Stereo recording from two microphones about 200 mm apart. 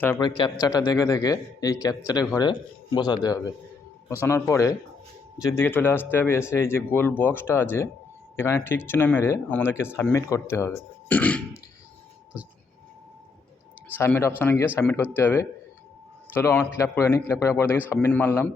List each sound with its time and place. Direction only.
0.2 s speech: 20° left (ahead or behind)
4.2 s speech: 10° left (ahead or behind)
13.8 s speech: 10° left (ahead or behind)